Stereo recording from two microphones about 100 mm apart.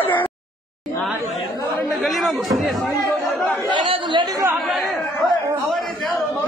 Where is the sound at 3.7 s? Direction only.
55° right (ahead or behind).